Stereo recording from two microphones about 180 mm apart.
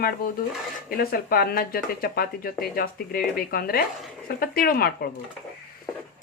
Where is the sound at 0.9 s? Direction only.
55° left (ahead or behind).